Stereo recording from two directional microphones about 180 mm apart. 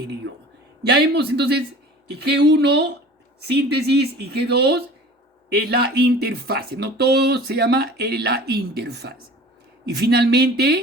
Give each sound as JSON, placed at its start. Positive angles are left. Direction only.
{"t": 0.9, "sound": "speech", "side_deg": -65}